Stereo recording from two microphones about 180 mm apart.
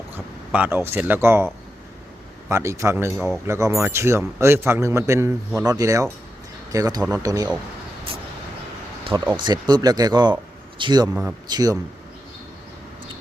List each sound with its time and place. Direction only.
0.1 s speech: 10° right (ahead or behind)
2.5 s a man's voice: 15° right (ahead or behind)
3.2 s speech: centre (ahead or behind)
3.4 s a man's voice: 15° right (ahead or behind)
9.0 s speech: 25° right (ahead or behind)
11.1 s a man's voice: 5° right (ahead or behind)
11.4 s speech: 20° right (ahead or behind)